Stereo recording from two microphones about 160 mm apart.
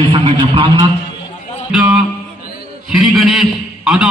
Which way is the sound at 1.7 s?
5° right (ahead or behind).